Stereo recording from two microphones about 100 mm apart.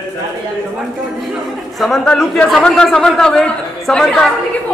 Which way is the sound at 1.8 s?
5° left (ahead or behind).